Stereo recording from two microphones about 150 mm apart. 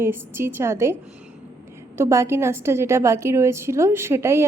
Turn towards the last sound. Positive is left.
turn(degrees=-15)  # may be behind; listen again after turning